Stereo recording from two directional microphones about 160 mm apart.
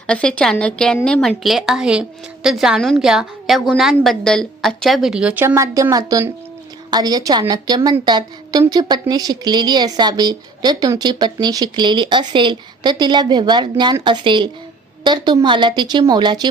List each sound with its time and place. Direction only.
0.1 s a woman's voice: 5° left (ahead or behind)
5.5 s a woman's voice: 20° right (ahead or behind)